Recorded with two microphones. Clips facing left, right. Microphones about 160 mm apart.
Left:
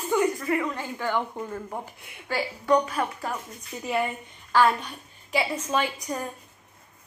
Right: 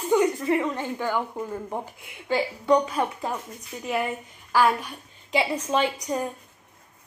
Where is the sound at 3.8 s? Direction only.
Centre (ahead or behind); by 6.3 s 20° right (ahead or behind).